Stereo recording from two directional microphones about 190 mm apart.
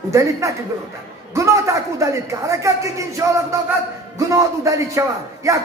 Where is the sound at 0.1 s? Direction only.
15° right (ahead or behind).